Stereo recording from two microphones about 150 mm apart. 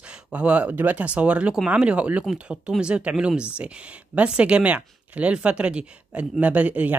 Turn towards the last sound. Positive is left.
turn(degrees=-10)  # may be behind; listen again after turning